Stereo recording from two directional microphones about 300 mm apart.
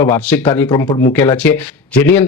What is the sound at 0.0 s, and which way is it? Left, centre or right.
Speech, centre.